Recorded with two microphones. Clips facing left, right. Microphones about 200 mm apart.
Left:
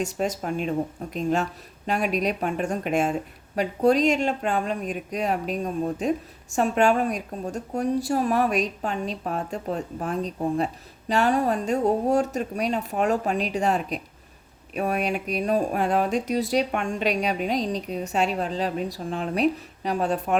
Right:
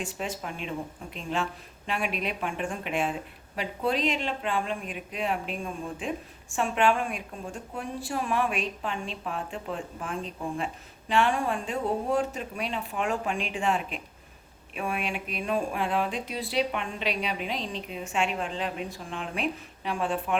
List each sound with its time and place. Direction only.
0.0 s speech: 40° left (ahead or behind)